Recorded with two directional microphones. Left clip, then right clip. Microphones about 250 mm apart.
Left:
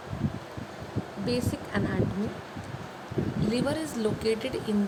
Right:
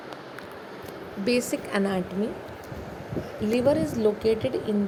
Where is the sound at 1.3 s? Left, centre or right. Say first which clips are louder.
Right 6 dB; centre.